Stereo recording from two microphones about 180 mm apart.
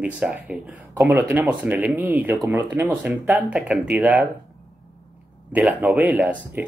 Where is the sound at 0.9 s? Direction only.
15° right (ahead or behind).